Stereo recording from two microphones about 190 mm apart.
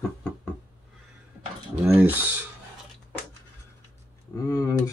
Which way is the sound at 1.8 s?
10° right (ahead or behind).